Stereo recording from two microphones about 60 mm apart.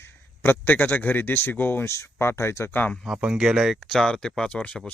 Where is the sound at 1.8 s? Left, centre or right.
Left.